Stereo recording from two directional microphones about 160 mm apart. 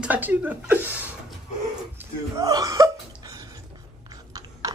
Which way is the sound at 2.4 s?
25° right (ahead or behind).